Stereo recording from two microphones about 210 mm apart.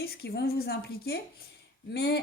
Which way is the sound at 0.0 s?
50° left (ahead or behind).